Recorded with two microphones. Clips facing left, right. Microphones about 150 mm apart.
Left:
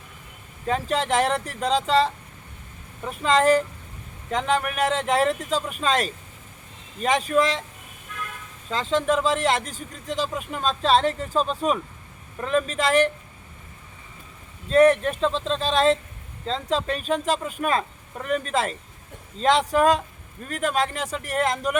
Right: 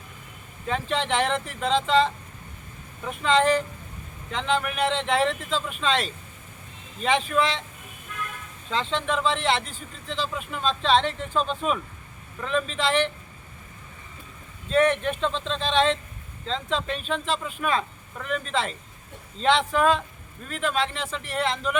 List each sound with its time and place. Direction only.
0.7 s speech: 40° left (ahead or behind)
8.7 s speech: 40° left (ahead or behind)
14.7 s a man's voice: 40° left (ahead or behind)